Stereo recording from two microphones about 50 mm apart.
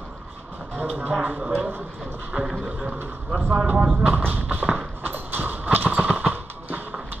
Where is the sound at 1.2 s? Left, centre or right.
Right.